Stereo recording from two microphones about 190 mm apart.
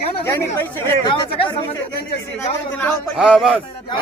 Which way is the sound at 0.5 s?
10° left (ahead or behind).